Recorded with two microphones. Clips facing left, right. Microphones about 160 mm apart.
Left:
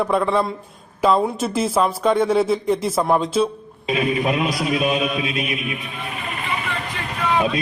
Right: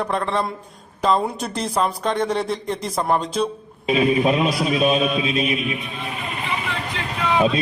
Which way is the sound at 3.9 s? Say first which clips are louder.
Right 3 dB; 25° right (ahead or behind).